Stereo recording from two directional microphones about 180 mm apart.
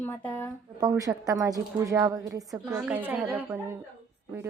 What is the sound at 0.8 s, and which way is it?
A woman's voice, 20° right (ahead or behind).